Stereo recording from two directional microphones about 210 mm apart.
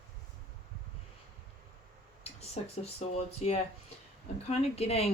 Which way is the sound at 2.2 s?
30° left (ahead or behind).